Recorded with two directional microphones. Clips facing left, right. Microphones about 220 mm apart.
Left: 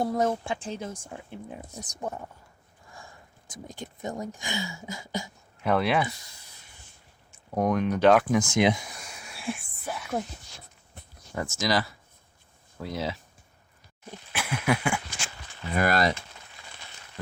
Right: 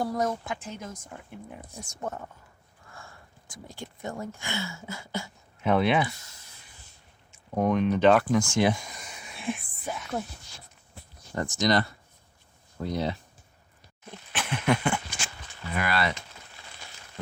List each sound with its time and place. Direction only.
0.0 s speech: 25° left (ahead or behind)
5.6 s speech: centre (ahead or behind)
7.5 s speech: 10° left (ahead or behind)
8.4 s speech: 20° left (ahead or behind)
8.7 s a sound: 5° left (ahead or behind)
11.6 s speech: centre (ahead or behind)
14.1 s a sound: 10° left (ahead or behind)
15.7 s speech: 40° left (ahead or behind)